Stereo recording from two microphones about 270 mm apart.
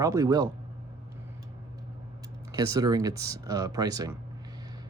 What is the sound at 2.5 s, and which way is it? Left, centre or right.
Speech, centre.